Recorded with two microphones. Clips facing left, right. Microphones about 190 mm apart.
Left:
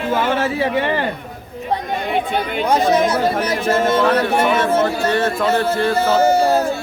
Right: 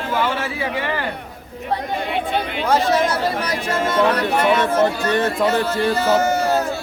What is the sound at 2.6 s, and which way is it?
Speech, 15° left (ahead or behind).